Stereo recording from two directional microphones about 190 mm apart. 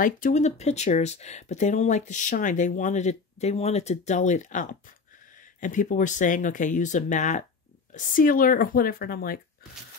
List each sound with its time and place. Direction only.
0.0 s speech: 40° left (ahead or behind)